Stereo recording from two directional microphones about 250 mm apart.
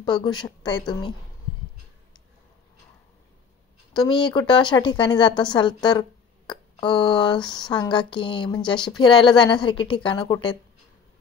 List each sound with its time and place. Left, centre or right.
0.0 s a woman's voice: centre
3.9 s a woman's voice: centre